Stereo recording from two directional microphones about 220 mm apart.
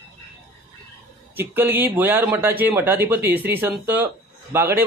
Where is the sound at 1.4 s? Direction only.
10° right (ahead or behind).